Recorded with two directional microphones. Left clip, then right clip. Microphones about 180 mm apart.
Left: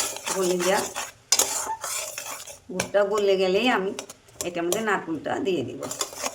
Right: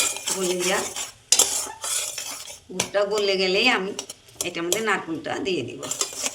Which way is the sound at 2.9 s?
45° left (ahead or behind).